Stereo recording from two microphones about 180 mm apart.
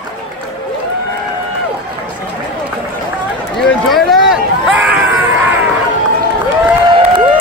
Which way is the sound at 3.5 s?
Centre (ahead or behind).